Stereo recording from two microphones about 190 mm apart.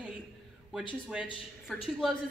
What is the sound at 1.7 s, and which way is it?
Speech, 5° left (ahead or behind).